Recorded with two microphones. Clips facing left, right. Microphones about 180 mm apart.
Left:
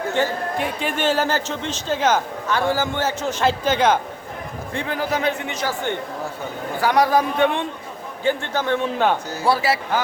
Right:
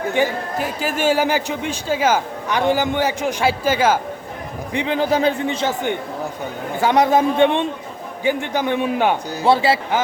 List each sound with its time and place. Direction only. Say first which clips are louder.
0.2 s a man's voice: right 2 dB; 15° right (ahead or behind)
4.7 s a man's voice: right 5 dB; 20° right (ahead or behind)
6.7 s a man's voice: right 2 dB; 20° right (ahead or behind)